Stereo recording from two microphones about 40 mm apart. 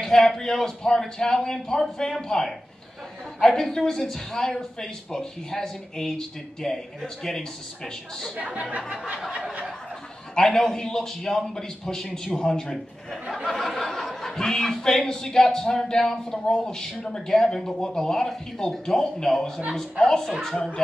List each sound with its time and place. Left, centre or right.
0.0 s a man's voice: centre
8.4 s speech: right
8.9 s a sound: right
10.3 s a woman's voice: centre